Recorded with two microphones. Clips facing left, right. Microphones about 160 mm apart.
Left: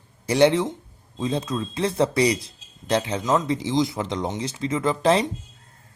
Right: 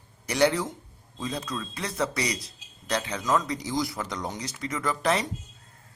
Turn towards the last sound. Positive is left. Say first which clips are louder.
# left 6 dB
turn(degrees=25)  # may be behind; listen again after turning